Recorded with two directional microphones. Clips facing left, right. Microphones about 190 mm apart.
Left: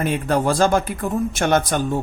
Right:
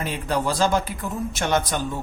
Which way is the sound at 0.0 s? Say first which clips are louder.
Left 5 dB; 50° left (ahead or behind).